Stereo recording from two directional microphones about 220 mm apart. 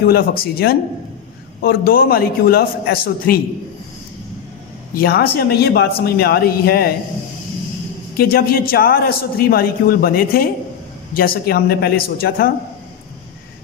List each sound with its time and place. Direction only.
0.0 s a man's voice: 45° left (ahead or behind)
4.9 s a man's voice: 45° left (ahead or behind)
8.2 s a man's voice: 45° left (ahead or behind)